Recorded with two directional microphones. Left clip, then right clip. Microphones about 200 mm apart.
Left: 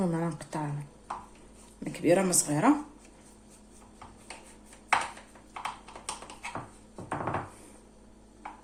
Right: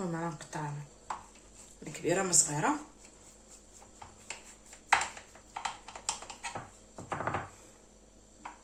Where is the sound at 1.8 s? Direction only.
45° left (ahead or behind).